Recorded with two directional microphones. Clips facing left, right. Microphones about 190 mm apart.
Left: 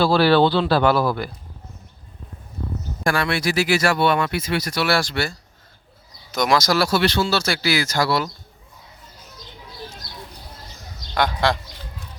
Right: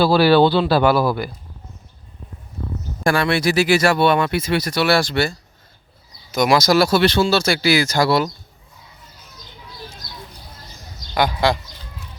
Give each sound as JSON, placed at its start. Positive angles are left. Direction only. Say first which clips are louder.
{"t": 0.0, "sound": "speech", "louder": "right 2 dB", "side_deg": -5}
{"t": 3.0, "sound": "speech", "louder": "right 4 dB", "side_deg": -25}
{"t": 6.3, "sound": "speech", "louder": "right 4 dB", "side_deg": -10}
{"t": 11.1, "sound": "a man's voice", "louder": "right 2 dB", "side_deg": -5}